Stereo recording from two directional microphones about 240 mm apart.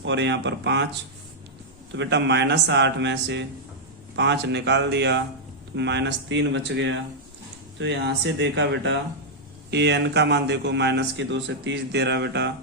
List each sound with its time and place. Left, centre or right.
0.0 s speech: right
2.0 s speech: right